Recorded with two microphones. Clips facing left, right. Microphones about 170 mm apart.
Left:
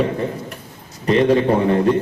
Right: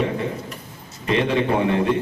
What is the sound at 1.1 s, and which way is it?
Speech, 40° left (ahead or behind).